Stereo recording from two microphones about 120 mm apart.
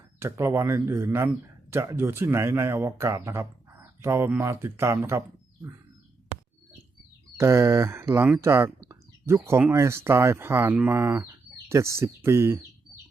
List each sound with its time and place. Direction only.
0.2 s speech: 20° right (ahead or behind)
7.3 s speech: 25° right (ahead or behind)
8.8 s a sound: 25° right (ahead or behind)
9.7 s speech: 20° right (ahead or behind)